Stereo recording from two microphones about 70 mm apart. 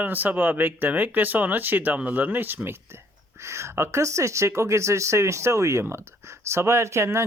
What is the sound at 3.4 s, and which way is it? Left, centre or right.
Speech, right.